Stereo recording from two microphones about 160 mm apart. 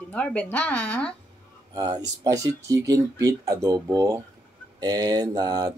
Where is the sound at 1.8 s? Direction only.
25° right (ahead or behind).